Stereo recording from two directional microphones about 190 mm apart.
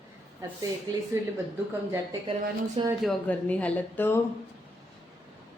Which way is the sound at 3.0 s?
5° left (ahead or behind).